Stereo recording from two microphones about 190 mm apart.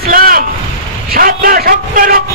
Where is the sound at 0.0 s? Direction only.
50° right (ahead or behind).